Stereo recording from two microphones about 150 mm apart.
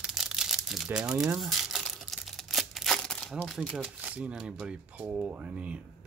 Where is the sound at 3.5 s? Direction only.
Centre (ahead or behind).